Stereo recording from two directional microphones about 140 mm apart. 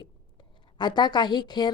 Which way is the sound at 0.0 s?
35° left (ahead or behind).